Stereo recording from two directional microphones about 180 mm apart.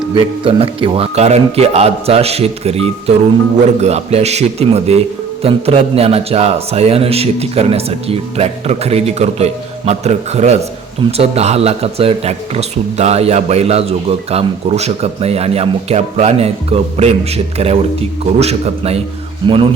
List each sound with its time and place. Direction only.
0.1 s a man's voice: 30° right (ahead or behind)